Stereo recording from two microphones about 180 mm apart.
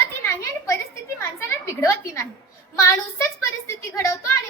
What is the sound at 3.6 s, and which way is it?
Speech, 15° left (ahead or behind).